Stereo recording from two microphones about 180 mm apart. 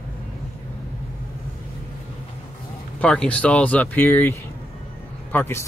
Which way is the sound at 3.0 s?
5° left (ahead or behind).